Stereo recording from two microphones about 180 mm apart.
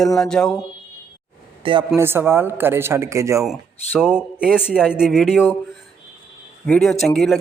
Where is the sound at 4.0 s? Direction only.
5° right (ahead or behind).